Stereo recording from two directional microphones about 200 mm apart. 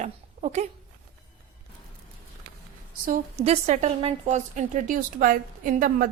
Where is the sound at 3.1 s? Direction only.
30° right (ahead or behind).